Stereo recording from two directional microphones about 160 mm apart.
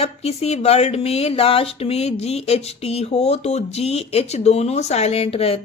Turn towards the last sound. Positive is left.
turn(degrees=40)  # may be behind; listen again after turning